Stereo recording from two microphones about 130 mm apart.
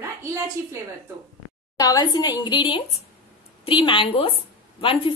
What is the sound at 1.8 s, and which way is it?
A woman's voice, 30° left (ahead or behind).